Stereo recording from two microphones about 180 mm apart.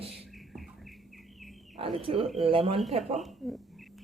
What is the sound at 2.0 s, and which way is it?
Speech, 30° right (ahead or behind).